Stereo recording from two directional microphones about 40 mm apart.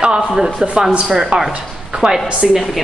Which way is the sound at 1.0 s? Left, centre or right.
Centre.